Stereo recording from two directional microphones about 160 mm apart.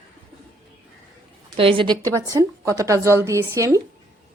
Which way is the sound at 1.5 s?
35° right (ahead or behind).